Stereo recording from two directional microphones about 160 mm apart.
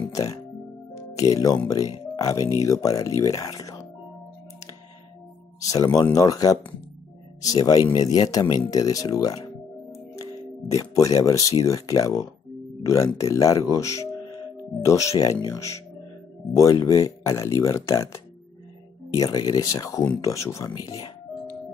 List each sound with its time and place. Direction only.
0.1 s speech: 20° left (ahead or behind)
5.6 s speech: 20° left (ahead or behind)
10.1 s music: 20° left (ahead or behind)
11.6 s speech: 20° left (ahead or behind)